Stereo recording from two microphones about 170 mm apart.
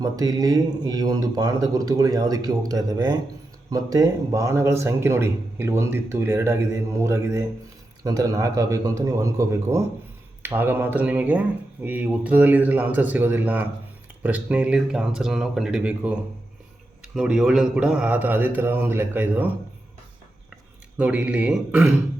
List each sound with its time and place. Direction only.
0.0 s a man's voice: 20° right (ahead or behind); by 16.1 s 5° right (ahead or behind)
17.2 s a man's voice: 5° right (ahead or behind)
21.0 s a man's voice: 10° right (ahead or behind)